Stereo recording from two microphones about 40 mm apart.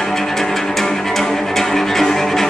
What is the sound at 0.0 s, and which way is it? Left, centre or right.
Music, centre.